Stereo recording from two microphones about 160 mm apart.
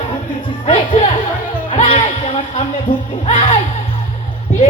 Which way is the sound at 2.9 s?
30° left (ahead or behind).